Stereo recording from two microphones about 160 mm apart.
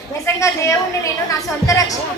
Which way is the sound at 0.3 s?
20° left (ahead or behind).